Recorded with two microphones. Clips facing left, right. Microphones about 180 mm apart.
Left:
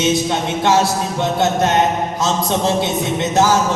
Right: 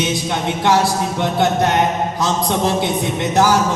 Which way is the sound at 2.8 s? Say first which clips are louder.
Left 1 dB; 25° left (ahead or behind).